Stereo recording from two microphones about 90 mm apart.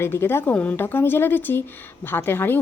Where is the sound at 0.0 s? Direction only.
25° left (ahead or behind).